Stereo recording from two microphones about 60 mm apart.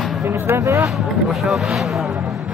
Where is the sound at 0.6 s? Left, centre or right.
Right.